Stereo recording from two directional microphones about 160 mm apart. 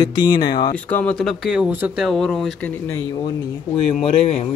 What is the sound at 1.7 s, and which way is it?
Speech, 10° right (ahead or behind).